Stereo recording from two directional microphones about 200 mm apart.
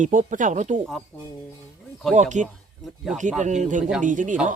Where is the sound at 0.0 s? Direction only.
40° right (ahead or behind).